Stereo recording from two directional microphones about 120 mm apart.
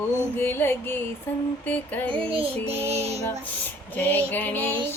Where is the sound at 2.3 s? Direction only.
50° right (ahead or behind).